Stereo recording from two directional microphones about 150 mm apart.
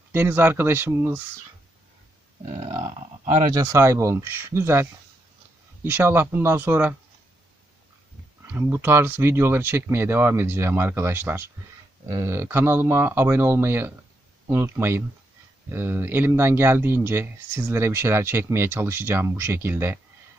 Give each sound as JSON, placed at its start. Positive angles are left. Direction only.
{"t": 0.1, "sound": "speech", "side_deg": -15}
{"t": 3.2, "sound": "speech", "side_deg": -50}
{"t": 3.5, "sound": "speech", "side_deg": -20}
{"t": 8.5, "sound": "speech", "side_deg": -15}